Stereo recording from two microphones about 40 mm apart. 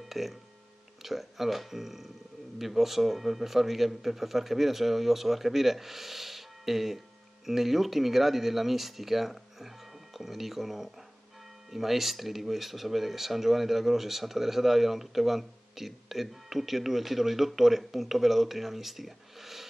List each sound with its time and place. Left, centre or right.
0.1 s speech: centre